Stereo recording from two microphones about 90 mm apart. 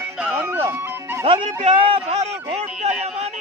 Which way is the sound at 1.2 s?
80° right.